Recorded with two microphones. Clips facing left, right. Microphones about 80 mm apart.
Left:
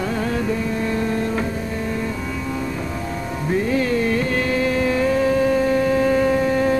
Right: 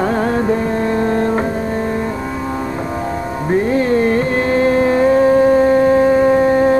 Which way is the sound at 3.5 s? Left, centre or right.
Right.